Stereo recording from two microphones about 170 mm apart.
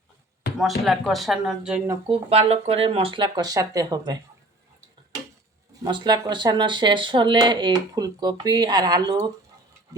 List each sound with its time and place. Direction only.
0.5 s speech: centre (ahead or behind)
2.0 s speech: 35° right (ahead or behind)
5.8 s speech: 25° right (ahead or behind)